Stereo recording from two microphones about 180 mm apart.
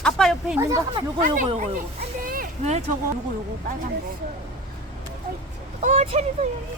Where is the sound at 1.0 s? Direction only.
30° right (ahead or behind).